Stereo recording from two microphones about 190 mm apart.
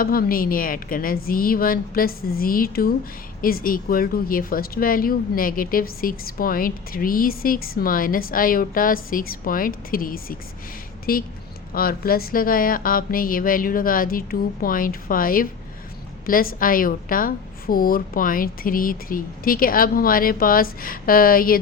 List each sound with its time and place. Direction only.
0.0 s a woman's voice: 50° left (ahead or behind)